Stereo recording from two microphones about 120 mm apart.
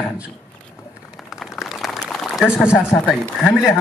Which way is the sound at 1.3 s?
5° right (ahead or behind).